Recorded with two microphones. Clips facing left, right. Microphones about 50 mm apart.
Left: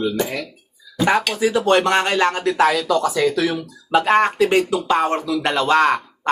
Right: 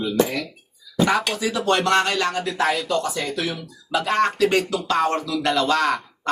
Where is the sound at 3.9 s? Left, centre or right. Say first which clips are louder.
Left 5 dB; left.